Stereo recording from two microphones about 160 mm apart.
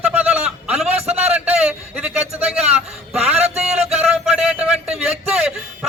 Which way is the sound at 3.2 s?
40° right (ahead or behind).